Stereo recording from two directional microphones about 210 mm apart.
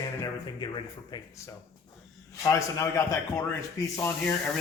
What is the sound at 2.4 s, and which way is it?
Speech, 15° left (ahead or behind).